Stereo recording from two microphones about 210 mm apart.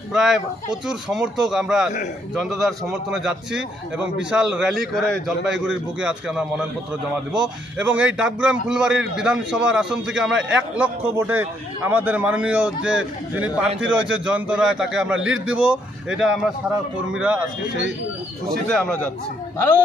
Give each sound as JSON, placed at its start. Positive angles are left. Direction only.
{"t": 0.1, "sound": "a man's voice", "side_deg": 0}
{"t": 15.1, "sound": "a man's voice", "side_deg": -65}
{"t": 15.5, "sound": "a man's voice", "side_deg": -5}
{"t": 18.7, "sound": "a man's voice", "side_deg": 5}